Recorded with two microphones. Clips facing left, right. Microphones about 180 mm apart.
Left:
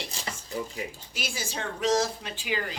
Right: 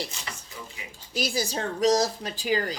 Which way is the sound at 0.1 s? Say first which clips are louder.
Left 6 dB; 35° left (ahead or behind).